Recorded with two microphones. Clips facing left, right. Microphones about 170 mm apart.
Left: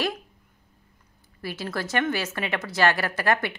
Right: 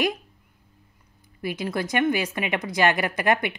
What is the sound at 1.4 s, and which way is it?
A woman's voice, 15° right (ahead or behind).